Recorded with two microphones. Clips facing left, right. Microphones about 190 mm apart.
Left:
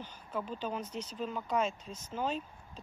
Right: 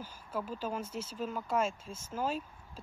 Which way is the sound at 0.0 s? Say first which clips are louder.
Even; 5° right (ahead or behind).